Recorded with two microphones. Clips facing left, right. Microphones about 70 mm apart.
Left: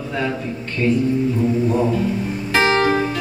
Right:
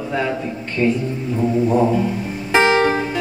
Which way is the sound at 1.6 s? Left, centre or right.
Centre.